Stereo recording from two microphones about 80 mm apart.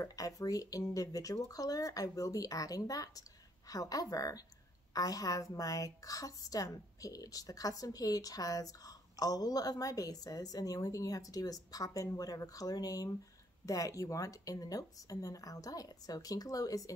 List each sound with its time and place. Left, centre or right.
0.0 s a woman's voice: left